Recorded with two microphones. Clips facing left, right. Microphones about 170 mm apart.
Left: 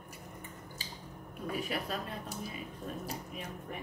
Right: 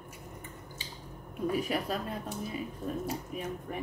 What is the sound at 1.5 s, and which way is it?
Speech, 40° right (ahead or behind).